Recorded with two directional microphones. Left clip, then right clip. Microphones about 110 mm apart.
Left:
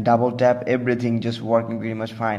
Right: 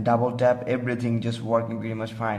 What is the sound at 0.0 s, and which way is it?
Speech, 20° left (ahead or behind).